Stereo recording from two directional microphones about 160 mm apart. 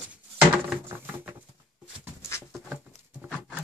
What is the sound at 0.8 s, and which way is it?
Patter, 10° right (ahead or behind).